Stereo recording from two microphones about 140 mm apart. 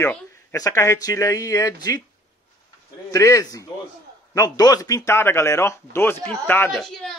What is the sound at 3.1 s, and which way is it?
Speech, 20° left (ahead or behind).